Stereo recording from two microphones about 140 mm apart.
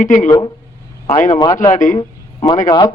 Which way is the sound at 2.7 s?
30° left (ahead or behind).